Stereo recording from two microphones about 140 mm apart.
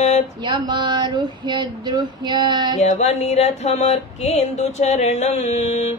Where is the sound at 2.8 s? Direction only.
55° left (ahead or behind).